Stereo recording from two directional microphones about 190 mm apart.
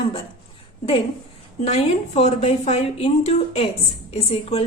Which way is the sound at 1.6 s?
35° left (ahead or behind).